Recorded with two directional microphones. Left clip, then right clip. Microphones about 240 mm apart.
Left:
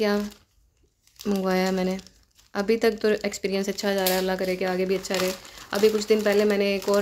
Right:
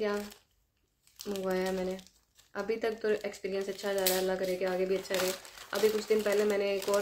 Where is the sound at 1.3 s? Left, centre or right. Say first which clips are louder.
Left 8 dB; left.